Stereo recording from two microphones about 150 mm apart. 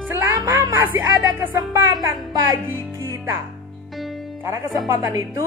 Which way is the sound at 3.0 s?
20° right (ahead or behind).